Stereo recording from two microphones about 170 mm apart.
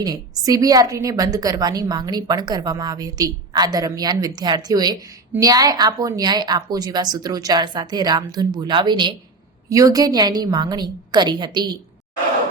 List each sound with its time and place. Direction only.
0.0 s a woman's voice: 25° right (ahead or behind)